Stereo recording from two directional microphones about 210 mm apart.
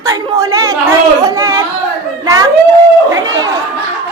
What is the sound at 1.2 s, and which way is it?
Carnatic music, 15° right (ahead or behind).